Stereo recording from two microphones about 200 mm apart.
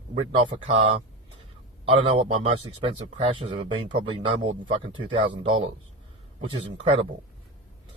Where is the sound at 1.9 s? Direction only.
25° right (ahead or behind).